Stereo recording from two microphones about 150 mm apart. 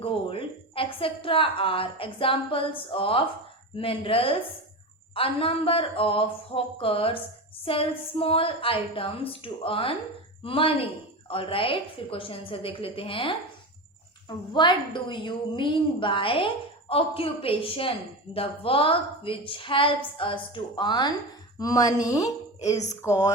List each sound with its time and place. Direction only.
0.0 s a woman's voice: 35° left (ahead or behind); by 23.3 s 20° left (ahead or behind)